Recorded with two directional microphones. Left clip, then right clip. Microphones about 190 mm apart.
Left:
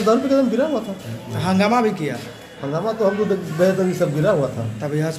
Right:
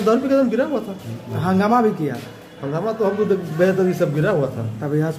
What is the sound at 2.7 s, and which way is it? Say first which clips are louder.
Speech: left 1 dB; 10° right (ahead or behind).